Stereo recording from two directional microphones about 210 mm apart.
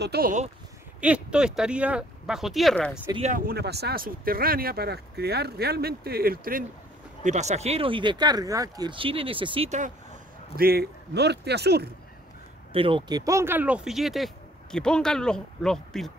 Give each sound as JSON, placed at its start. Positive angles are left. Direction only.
{"t": 0.0, "sound": "speech", "side_deg": -45}
{"t": 1.0, "sound": "speech", "side_deg": -5}
{"t": 3.2, "sound": "speech", "side_deg": -40}
{"t": 7.2, "sound": "speech", "side_deg": -35}
{"t": 10.5, "sound": "speech", "side_deg": -45}
{"t": 12.7, "sound": "speech", "side_deg": -25}